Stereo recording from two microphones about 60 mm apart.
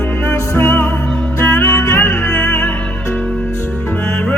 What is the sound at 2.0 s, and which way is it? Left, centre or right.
Music, left.